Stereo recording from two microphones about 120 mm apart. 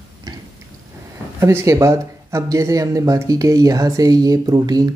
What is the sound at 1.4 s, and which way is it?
Speech, 25° right (ahead or behind).